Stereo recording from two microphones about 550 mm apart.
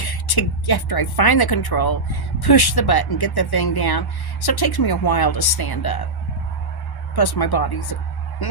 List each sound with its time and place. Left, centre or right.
0.0 s speech: left
7.2 s speech: left